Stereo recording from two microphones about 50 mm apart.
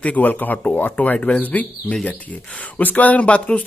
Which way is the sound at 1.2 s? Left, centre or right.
Left.